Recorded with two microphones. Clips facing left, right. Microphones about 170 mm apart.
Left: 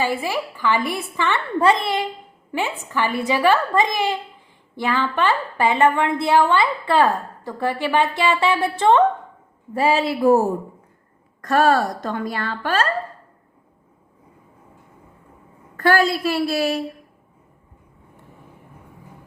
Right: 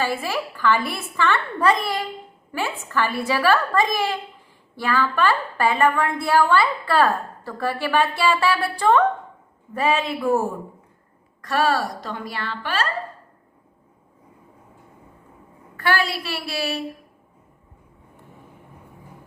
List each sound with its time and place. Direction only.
0.0 s a woman's voice: 15° left (ahead or behind); by 12.9 s 45° left (ahead or behind)
15.8 s a woman's voice: 45° left (ahead or behind)